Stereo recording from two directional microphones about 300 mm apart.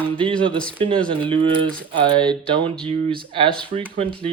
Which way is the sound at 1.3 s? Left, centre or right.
Centre.